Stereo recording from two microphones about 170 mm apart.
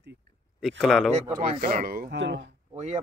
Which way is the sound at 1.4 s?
50° right (ahead or behind).